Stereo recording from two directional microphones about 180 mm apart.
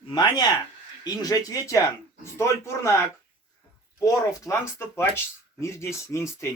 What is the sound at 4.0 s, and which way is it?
A man's voice, 15° left (ahead or behind).